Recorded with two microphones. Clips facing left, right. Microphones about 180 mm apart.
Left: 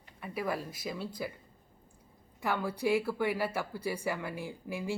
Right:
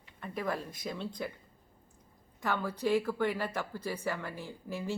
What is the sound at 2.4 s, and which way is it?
Speech, 10° left (ahead or behind).